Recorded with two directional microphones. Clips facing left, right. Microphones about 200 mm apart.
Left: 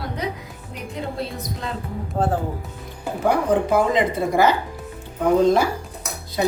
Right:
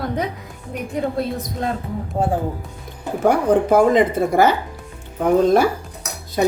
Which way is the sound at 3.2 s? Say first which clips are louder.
Right 4 dB; 45° right (ahead or behind).